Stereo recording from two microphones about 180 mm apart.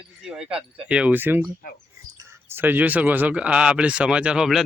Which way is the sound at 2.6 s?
10° right (ahead or behind).